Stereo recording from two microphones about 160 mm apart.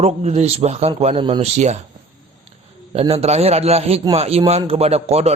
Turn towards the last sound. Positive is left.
turn(degrees=-40)  # may be behind; listen again after turning